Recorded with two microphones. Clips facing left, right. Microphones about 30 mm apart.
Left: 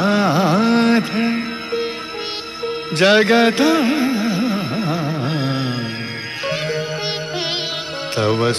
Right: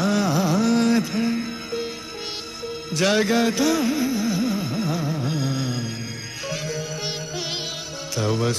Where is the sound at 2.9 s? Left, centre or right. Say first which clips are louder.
Left 7 dB; left.